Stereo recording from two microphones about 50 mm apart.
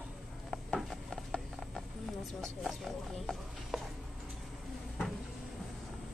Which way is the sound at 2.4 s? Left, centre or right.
Centre.